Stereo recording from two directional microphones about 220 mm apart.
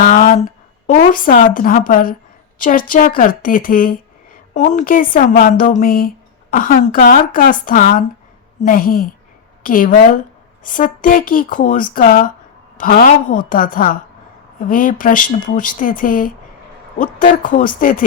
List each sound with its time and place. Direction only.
0.0 s speech: 35° left (ahead or behind)